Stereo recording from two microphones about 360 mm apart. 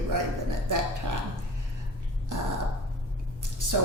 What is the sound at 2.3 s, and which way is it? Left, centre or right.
Speech, right.